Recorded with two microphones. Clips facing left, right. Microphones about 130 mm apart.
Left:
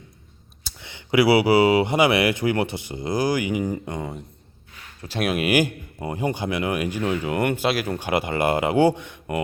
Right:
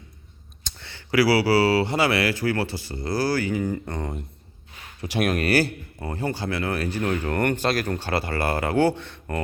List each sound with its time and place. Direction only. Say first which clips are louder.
0.6 s speech: left 1 dB; 15° left (ahead or behind)
5.2 s a man's voice: left 1 dB; 10° left (ahead or behind)